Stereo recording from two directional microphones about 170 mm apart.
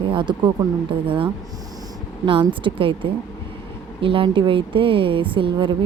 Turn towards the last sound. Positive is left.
turn(degrees=-30)  # may be behind; listen again after turning